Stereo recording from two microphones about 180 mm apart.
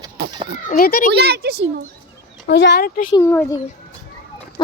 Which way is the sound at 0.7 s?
55° left (ahead or behind).